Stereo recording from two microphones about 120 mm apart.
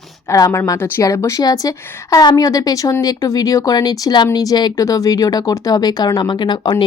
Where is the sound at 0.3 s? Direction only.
25° left (ahead or behind).